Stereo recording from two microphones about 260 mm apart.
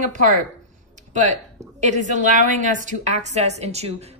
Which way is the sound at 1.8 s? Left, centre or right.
Right.